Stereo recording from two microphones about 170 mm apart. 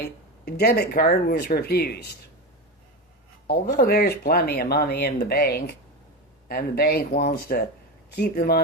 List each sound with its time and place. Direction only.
0.0 s speech: 65° left (ahead or behind)
3.4 s speech: 70° left (ahead or behind)